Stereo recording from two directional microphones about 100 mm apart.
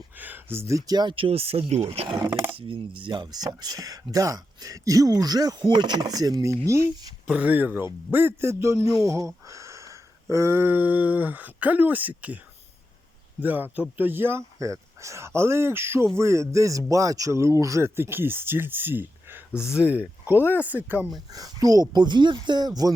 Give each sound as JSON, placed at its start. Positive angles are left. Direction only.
{"t": 0.2, "sound": "speech", "side_deg": -20}
{"t": 0.9, "sound": "speech", "side_deg": -45}
{"t": 1.1, "sound": "speech", "side_deg": -70}
{"t": 2.6, "sound": "speech", "side_deg": -60}
{"t": 7.3, "sound": "speech", "side_deg": -15}
{"t": 13.4, "sound": "speech", "side_deg": -15}
{"t": 21.3, "sound": "speech", "side_deg": -40}